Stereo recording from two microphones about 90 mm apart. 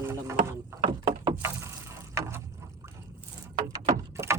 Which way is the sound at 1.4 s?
30° right (ahead or behind).